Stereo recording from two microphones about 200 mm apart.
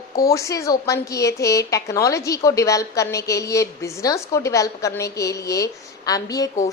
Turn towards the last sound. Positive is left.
turn(degrees=20)  # may be behind; listen again after turning